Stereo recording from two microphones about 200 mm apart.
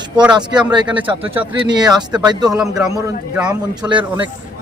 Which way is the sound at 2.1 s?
20° right (ahead or behind).